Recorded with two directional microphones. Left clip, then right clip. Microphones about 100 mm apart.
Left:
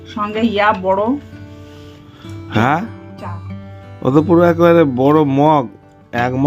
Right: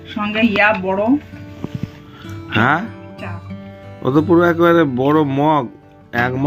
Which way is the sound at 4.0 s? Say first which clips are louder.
Left 2 dB; 90° left.